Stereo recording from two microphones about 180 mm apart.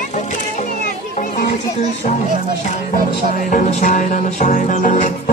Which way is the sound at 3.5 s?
40° left (ahead or behind).